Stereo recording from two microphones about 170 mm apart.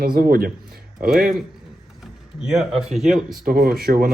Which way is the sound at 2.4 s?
5° right (ahead or behind).